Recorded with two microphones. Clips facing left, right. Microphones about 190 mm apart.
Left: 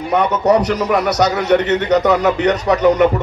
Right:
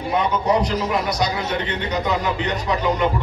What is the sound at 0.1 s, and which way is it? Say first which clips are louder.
A man's voice: left 6 dB; 75° left (ahead or behind).